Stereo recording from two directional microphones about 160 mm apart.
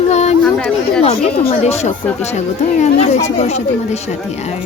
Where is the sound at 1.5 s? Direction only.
40° left (ahead or behind).